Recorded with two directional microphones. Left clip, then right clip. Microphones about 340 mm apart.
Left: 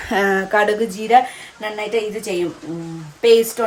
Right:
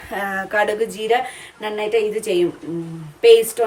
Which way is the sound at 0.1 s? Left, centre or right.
Left.